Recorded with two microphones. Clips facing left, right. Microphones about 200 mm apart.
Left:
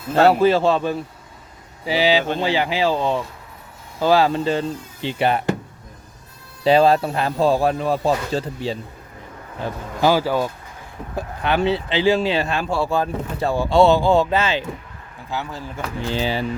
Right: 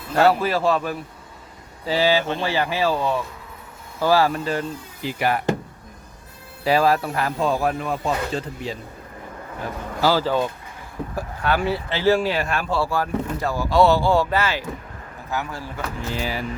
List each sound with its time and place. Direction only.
0.2 s speech: 25° left (ahead or behind)
1.8 s speech: 15° left (ahead or behind)
6.7 s speech: 25° left (ahead or behind)
9.6 s speech: 20° left (ahead or behind)
11.1 s speech: 20° left (ahead or behind)
16.0 s speech: 30° left (ahead or behind)